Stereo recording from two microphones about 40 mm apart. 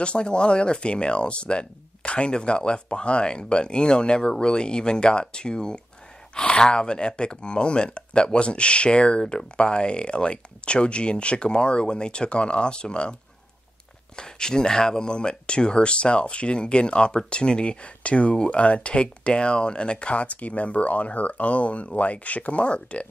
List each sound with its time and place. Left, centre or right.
0.0 s speech: left
14.1 s speech: centre